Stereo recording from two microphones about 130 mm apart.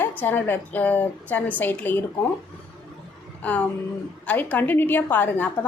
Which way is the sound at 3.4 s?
10° left (ahead or behind).